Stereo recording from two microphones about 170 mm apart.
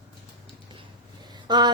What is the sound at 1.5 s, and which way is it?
Speech, 25° right (ahead or behind).